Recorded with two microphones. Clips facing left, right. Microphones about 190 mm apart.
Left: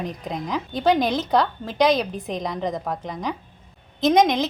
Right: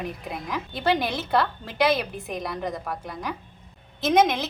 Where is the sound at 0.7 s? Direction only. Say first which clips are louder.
Left 5 dB; 15° left (ahead or behind).